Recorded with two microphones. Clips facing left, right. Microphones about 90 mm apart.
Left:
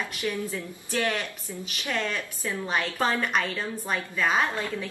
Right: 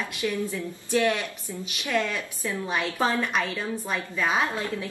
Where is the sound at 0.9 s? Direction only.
15° right (ahead or behind).